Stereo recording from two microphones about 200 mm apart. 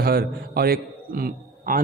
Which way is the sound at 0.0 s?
50° right (ahead or behind).